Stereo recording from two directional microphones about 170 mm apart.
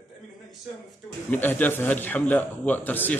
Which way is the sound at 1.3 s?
10° left (ahead or behind).